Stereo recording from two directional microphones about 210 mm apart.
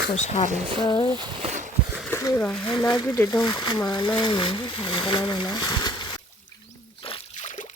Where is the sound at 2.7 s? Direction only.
20° left (ahead or behind).